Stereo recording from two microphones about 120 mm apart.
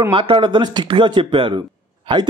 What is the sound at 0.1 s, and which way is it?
A man's voice, 45° right (ahead or behind).